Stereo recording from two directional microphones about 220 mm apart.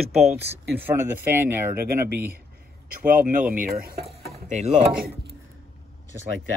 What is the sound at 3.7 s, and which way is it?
Stir, 40° right (ahead or behind).